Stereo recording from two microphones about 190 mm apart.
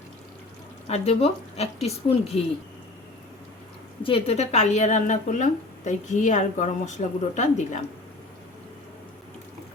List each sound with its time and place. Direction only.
0.9 s speech: 35° left (ahead or behind)
4.0 s speech: 30° left (ahead or behind)